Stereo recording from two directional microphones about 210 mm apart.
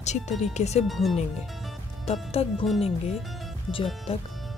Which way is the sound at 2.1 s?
30° left (ahead or behind).